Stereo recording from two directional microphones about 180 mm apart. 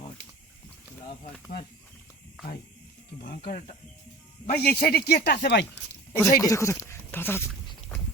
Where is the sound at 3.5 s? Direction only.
45° left (ahead or behind).